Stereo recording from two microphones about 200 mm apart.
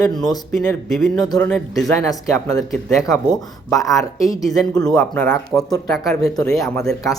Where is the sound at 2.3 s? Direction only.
15° left (ahead or behind).